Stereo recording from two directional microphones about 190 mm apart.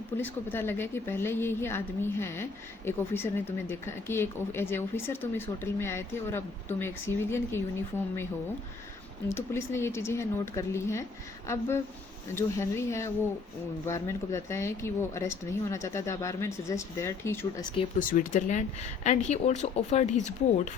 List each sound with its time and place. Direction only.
0.2 s a woman's voice: 10° left (ahead or behind)
9.3 s a woman's voice: 15° left (ahead or behind)
18.1 s speech: 45° left (ahead or behind)